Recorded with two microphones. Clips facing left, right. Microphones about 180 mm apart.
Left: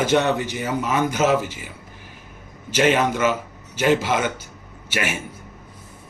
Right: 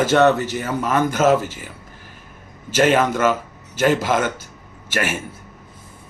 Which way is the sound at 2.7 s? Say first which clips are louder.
Right 2 dB; 45° right (ahead or behind).